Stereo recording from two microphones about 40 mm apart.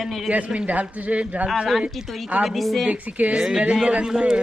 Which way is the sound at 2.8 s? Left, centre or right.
Right.